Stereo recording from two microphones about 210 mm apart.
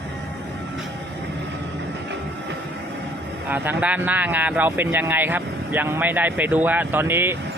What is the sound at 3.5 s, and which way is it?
Speech, 5° right (ahead or behind).